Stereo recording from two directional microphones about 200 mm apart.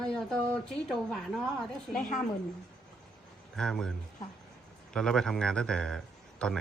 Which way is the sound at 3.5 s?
5° left (ahead or behind).